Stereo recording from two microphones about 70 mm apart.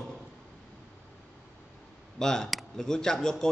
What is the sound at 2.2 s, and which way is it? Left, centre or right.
Speech, centre.